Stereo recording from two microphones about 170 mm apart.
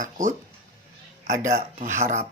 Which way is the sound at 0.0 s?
50° right (ahead or behind).